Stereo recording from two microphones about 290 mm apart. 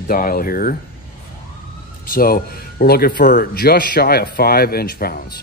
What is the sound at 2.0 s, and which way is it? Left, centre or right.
Speech, left.